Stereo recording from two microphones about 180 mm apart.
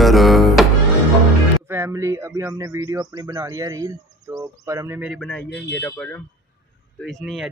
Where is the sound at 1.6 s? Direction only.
15° right (ahead or behind).